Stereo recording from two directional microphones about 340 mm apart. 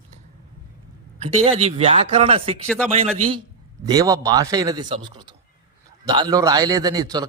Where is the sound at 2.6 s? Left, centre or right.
Centre.